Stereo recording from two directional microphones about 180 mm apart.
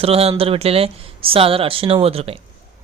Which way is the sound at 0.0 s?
35° right (ahead or behind).